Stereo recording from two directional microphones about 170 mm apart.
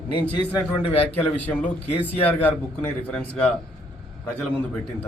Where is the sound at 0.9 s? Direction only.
10° left (ahead or behind).